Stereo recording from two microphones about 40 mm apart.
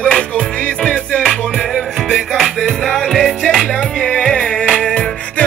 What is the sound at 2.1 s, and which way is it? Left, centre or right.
Music, centre.